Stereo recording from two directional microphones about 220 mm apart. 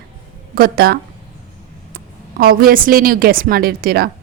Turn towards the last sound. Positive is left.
turn(degrees=-45)  # may be behind; listen again after turning